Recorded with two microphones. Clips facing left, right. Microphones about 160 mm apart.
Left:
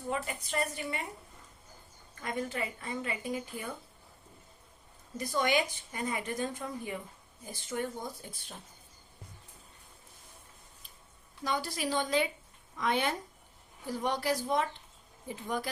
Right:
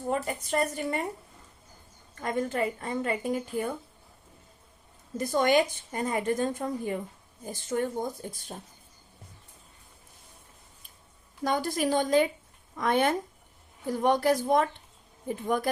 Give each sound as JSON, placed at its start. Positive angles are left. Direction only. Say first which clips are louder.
{"t": 0.1, "sound": "a woman's voice", "louder": "right 6 dB", "side_deg": -45}
{"t": 2.1, "sound": "a woman's voice", "louder": "right 6 dB", "side_deg": -45}
{"t": 5.1, "sound": "a woman's voice", "louder": "right 6 dB", "side_deg": -50}
{"t": 11.4, "sound": "a woman's voice", "louder": "right 6 dB", "side_deg": -50}